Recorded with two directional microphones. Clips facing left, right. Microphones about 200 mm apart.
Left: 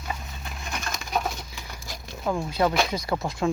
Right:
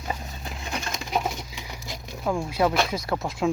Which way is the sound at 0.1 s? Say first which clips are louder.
Right 2 dB; 30° right (ahead or behind).